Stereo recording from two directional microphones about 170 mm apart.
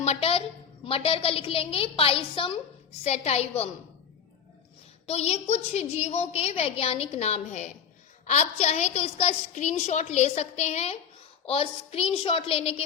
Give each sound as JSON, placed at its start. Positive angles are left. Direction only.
{"t": 0.0, "sound": "a woman's voice", "side_deg": 40}
{"t": 5.0, "sound": "a woman's voice", "side_deg": 40}